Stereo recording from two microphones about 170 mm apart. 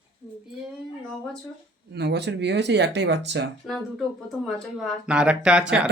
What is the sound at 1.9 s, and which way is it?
Speech, 85° right.